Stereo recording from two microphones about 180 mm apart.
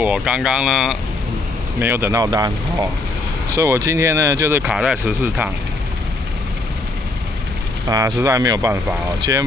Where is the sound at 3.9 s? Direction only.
15° right (ahead or behind).